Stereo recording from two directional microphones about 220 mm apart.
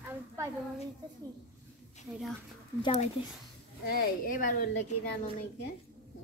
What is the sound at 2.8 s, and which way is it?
Speech, 25° left (ahead or behind).